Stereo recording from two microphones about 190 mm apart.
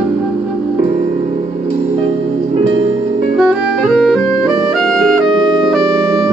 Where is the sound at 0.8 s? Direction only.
35° right (ahead or behind).